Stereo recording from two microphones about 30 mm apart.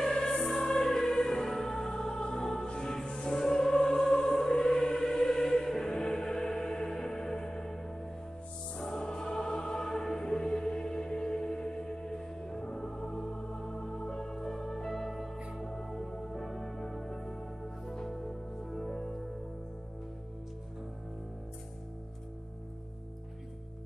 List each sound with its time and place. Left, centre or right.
0.0 s music: left
2.6 s music: left
3.3 s music: centre
18.1 s music: centre